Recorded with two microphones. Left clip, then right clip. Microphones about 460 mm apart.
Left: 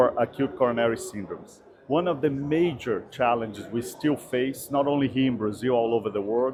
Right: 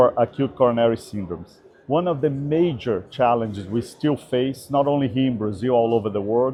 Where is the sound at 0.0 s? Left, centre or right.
Right.